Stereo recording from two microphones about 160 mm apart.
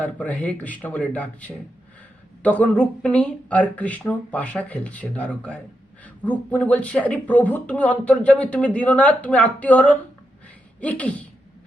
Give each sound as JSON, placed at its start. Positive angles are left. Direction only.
{"t": 0.0, "sound": "speech", "side_deg": 10}